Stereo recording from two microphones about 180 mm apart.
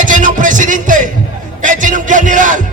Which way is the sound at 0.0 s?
45° right (ahead or behind).